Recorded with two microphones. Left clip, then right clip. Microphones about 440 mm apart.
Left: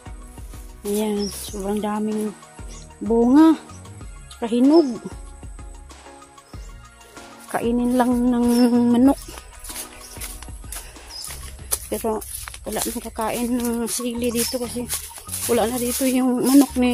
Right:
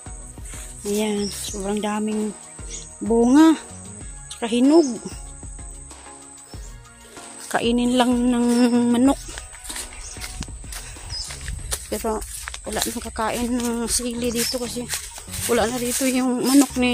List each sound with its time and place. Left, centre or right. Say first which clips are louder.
0.9 s speech: even; left
3.1 s speech: even; left
5.1 s music: even; left
7.5 s speech: right 1 dB; left
11.2 s speech: right 1 dB; left